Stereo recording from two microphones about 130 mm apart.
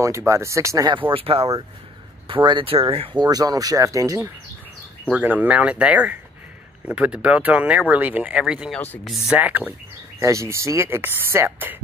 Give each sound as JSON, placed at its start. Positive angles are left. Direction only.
{"t": 0.0, "sound": "speech", "side_deg": -20}
{"t": 1.1, "sound": "speech", "side_deg": -45}
{"t": 3.3, "sound": "speech", "side_deg": -30}
{"t": 5.0, "sound": "speech", "side_deg": -10}
{"t": 8.7, "sound": "speech", "side_deg": 15}
{"t": 9.0, "sound": "speech", "side_deg": 0}
{"t": 9.4, "sound": "speech", "side_deg": -15}